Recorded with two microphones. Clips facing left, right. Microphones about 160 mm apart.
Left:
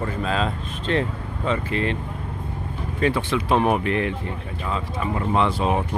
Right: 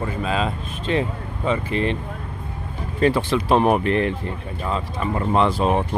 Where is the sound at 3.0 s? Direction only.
35° right (ahead or behind).